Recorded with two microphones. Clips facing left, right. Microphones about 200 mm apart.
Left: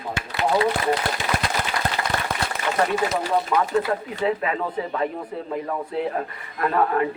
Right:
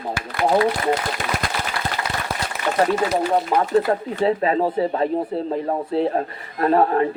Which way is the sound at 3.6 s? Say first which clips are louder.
Right 4 dB; 35° right (ahead or behind).